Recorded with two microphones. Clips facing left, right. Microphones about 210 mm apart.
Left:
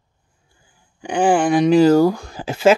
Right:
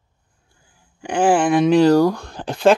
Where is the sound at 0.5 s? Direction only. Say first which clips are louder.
Even; centre (ahead or behind).